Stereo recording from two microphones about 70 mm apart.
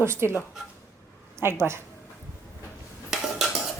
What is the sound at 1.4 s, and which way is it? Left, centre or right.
Speech, right.